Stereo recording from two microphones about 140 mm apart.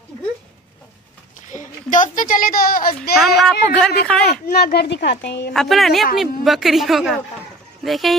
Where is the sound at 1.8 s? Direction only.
70° left (ahead or behind); by 2.9 s 90° left.